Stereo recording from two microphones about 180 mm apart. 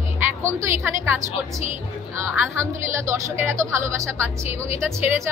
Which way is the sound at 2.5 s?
15° right (ahead or behind).